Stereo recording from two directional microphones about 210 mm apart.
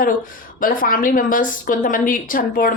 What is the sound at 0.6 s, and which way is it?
A woman's voice, 40° left (ahead or behind).